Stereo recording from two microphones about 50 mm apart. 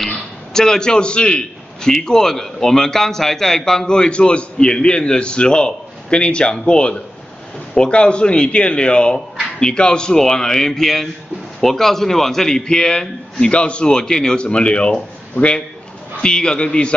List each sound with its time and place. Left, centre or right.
0.1 s a man's voice: centre
16.2 s a man's voice: centre